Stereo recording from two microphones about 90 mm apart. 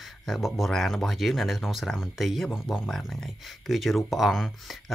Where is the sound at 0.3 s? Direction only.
Centre (ahead or behind).